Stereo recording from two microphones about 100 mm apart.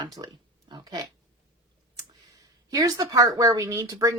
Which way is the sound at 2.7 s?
35° right (ahead or behind).